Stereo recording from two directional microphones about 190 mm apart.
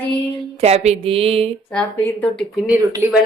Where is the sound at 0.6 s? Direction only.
35° right (ahead or behind).